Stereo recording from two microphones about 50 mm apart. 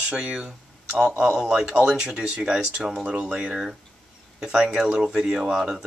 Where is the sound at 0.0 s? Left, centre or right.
Right.